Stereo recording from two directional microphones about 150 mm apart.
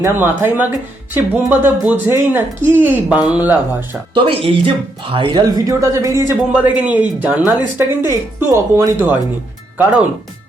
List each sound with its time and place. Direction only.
0.0 s speech: 15° right (ahead or behind)
4.1 s speech: 35° right (ahead or behind); by 6.3 s 20° right (ahead or behind)
6.5 s speech: 10° right (ahead or behind)